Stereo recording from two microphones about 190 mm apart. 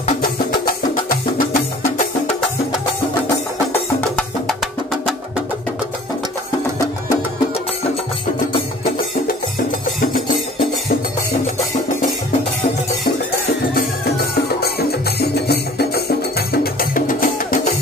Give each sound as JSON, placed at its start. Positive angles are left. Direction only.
{"t": 1.5, "sound": "music", "side_deg": 45}
{"t": 13.7, "sound": "music", "side_deg": 55}